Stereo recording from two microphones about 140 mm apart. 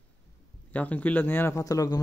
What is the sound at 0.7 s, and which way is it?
Speech, 10° left (ahead or behind).